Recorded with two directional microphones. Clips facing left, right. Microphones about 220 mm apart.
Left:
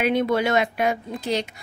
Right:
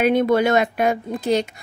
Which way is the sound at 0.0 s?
50° right (ahead or behind).